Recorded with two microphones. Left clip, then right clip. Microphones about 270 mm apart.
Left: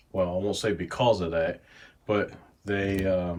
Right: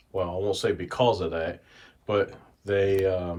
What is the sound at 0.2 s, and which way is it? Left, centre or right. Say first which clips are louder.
Speech: even; centre.